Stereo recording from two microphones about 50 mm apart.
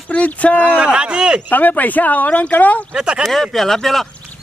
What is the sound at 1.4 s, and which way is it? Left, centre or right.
Speech, left.